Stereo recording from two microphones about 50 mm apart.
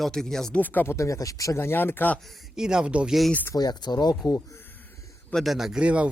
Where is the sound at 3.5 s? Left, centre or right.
Left.